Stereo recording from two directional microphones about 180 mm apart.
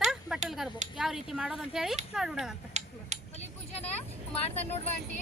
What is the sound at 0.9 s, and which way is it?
Speech, centre (ahead or behind).